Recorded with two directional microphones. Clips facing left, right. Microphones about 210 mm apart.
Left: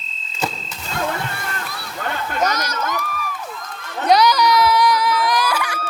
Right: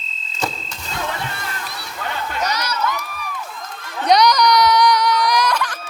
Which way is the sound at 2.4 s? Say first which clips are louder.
Left 1 dB; 50° left (ahead or behind).